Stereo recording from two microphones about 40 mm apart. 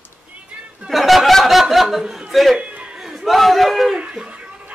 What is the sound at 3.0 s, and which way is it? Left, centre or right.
Speech, centre.